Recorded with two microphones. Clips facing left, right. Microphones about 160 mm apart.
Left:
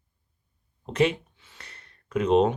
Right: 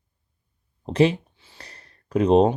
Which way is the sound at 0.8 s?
35° right (ahead or behind).